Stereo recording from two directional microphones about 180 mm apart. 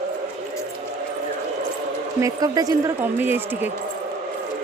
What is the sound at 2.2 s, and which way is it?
A woman's voice, 20° right (ahead or behind).